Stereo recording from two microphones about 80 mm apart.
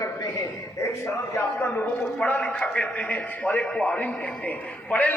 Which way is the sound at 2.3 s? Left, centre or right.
Centre.